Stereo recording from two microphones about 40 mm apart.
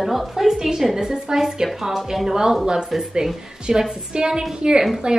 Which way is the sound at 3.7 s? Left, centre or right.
Centre.